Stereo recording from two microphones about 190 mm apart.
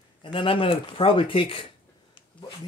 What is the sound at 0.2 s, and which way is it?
Speech, 25° left (ahead or behind).